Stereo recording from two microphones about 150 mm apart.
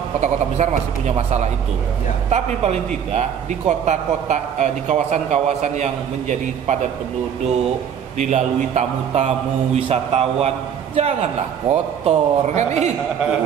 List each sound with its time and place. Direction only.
0.2 s a man's voice: 50° right (ahead or behind)
8.2 s a man's voice: 50° right (ahead or behind)